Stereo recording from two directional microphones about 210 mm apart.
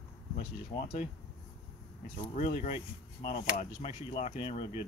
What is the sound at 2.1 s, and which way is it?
Speech, 35° left (ahead or behind).